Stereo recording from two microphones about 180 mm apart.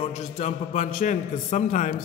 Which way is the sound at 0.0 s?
40° left (ahead or behind).